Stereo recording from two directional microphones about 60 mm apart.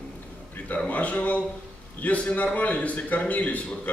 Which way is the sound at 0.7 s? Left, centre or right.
Left.